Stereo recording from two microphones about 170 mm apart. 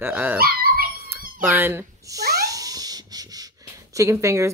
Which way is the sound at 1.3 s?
10° right (ahead or behind).